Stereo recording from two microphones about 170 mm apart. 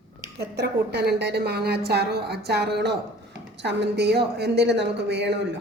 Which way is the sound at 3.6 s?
90° right.